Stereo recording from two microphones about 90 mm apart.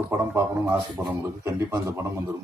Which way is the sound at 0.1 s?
30° right (ahead or behind).